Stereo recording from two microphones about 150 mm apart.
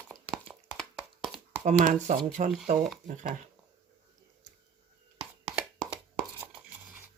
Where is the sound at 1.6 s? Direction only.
55° right (ahead or behind).